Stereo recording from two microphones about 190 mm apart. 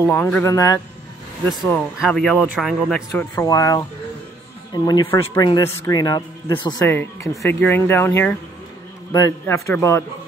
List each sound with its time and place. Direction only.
0.0 s speech: 10° left (ahead or behind)
2.0 s speech: centre (ahead or behind)
3.3 s speech: 15° left (ahead or behind)
6.9 s speech: 10° left (ahead or behind)